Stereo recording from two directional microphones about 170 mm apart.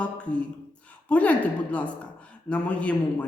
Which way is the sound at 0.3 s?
5° left (ahead or behind).